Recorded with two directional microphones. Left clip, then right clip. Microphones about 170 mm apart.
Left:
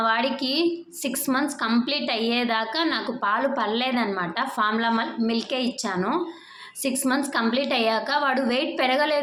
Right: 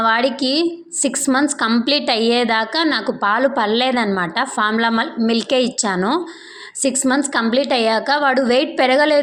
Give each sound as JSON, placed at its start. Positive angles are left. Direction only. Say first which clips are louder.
{"t": 0.0, "sound": "a woman's voice", "louder": "right 7 dB", "side_deg": -45}